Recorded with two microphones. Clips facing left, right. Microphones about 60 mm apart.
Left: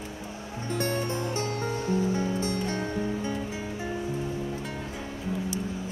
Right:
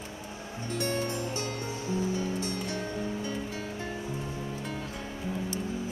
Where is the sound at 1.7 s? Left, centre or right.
Left.